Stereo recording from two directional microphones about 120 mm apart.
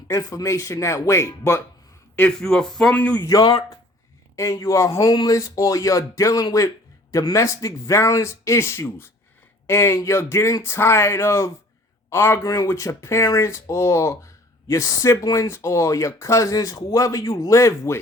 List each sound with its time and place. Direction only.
0.1 s speech: 30° left (ahead or behind)
2.4 s speech: 5° left (ahead or behind)
3.2 s speech: 30° left (ahead or behind)